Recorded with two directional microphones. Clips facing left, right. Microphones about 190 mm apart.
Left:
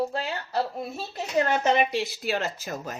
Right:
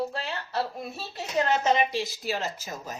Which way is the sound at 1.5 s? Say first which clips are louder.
Right 1 dB; 55° left (ahead or behind).